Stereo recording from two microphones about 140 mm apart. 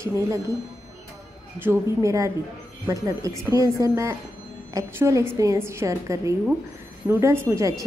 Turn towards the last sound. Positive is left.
turn(degrees=-20)  # may be behind; listen again after turning